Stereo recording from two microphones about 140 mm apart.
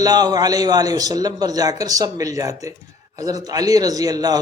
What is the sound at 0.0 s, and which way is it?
A man's voice, 30° right (ahead or behind).